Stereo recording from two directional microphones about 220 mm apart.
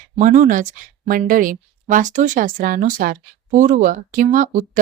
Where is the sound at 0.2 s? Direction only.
35° right (ahead or behind).